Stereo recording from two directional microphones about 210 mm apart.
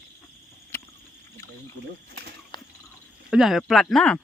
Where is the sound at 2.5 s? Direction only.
20° left (ahead or behind).